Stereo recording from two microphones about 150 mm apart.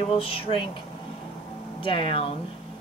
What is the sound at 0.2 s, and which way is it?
Speech, 40° left (ahead or behind).